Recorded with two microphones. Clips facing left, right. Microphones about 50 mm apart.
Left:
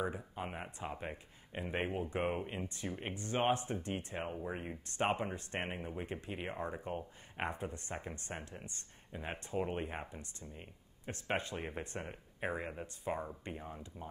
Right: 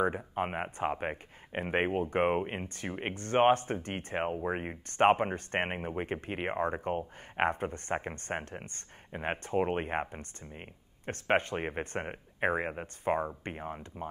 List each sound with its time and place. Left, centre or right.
0.0 s speech: right